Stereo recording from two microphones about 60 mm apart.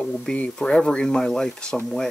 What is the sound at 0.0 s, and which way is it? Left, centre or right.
Speech, centre.